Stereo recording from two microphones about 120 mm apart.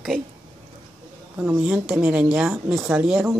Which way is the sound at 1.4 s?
10° right (ahead or behind).